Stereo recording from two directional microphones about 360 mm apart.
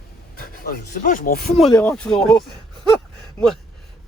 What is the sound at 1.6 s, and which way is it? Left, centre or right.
Speech, centre.